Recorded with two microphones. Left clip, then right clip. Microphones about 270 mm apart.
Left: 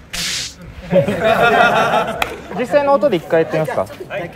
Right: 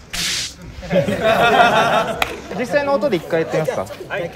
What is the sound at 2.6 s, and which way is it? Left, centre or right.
Speech, left.